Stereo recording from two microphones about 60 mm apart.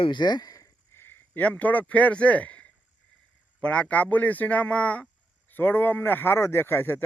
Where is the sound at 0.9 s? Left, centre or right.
Left.